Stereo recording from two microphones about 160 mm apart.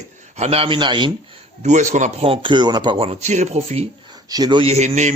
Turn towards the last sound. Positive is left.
turn(degrees=-45)  # may be behind; listen again after turning